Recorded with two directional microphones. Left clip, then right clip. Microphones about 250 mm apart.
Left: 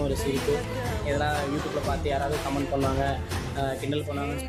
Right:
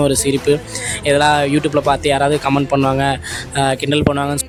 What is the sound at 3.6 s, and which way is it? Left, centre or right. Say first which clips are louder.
Speech: right 15 dB; right.